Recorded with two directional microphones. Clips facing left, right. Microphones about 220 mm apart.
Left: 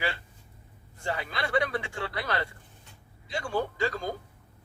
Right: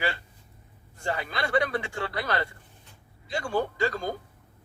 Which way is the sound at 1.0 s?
45° right (ahead or behind).